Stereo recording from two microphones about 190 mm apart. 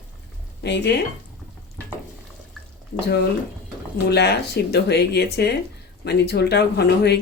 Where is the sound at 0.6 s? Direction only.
60° left (ahead or behind).